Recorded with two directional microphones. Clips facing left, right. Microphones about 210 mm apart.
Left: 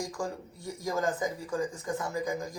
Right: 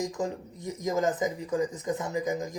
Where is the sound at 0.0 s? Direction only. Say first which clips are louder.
Right 4 dB; 20° right (ahead or behind).